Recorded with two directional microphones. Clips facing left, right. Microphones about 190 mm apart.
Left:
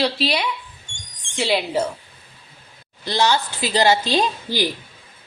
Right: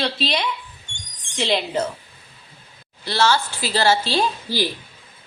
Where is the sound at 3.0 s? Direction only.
15° left (ahead or behind).